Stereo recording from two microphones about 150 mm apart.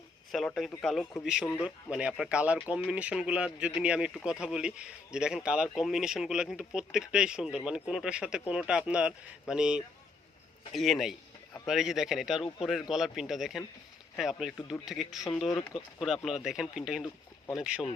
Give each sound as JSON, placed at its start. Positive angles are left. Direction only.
{"t": 0.3, "sound": "speech", "side_deg": 0}
{"t": 17.0, "sound": "speech", "side_deg": 15}
{"t": 17.6, "sound": "speech", "side_deg": -5}